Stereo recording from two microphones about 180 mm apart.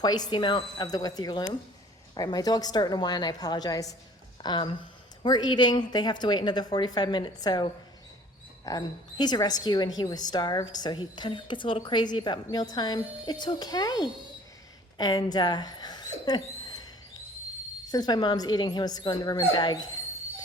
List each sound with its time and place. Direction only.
0.0 s a woman's voice: 20° left (ahead or behind)
17.9 s a woman's voice: 20° left (ahead or behind)